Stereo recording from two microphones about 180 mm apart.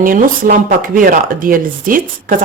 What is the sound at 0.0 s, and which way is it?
Speech, 50° right (ahead or behind).